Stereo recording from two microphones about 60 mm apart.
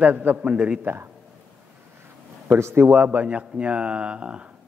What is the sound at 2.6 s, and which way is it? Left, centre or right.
Speech, right.